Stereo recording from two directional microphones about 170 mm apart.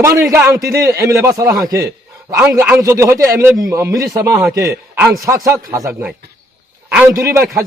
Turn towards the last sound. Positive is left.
turn(degrees=-15)  # may be behind; listen again after turning